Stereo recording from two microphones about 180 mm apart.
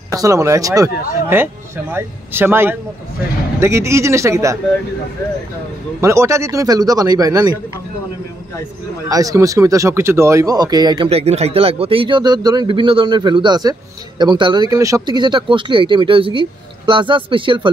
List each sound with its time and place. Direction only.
0.1 s speech: 20° right (ahead or behind)
5.9 s speech: 15° right (ahead or behind)
9.1 s speech: 20° right (ahead or behind)
11.1 s speech: 35° right (ahead or behind)